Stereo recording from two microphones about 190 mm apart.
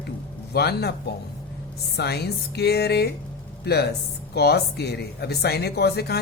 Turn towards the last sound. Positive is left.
turn(degrees=55)  # may be behind; listen again after turning